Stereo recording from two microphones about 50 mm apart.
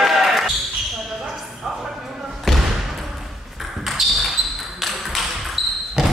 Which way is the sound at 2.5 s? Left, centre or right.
Centre.